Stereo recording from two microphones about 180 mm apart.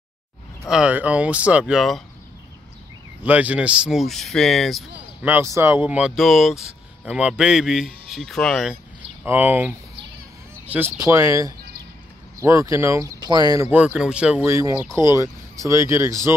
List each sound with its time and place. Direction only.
0.7 s speech: 5° right (ahead or behind)
3.3 s speech: 10° right (ahead or behind)
5.2 s speech: 10° right (ahead or behind)
9.2 s speech: 10° right (ahead or behind)